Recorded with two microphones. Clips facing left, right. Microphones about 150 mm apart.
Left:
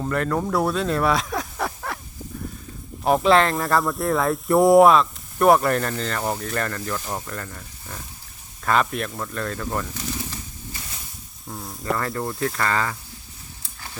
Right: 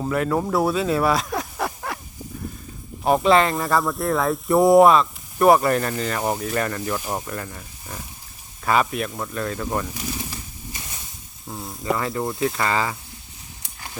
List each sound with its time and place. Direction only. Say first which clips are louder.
0.0 s speech: right 1 dB; 5° right (ahead or behind)
3.0 s speech: even; centre (ahead or behind)
11.4 s speech: right 2 dB; centre (ahead or behind)
12.4 s speech: right 1 dB; 20° right (ahead or behind)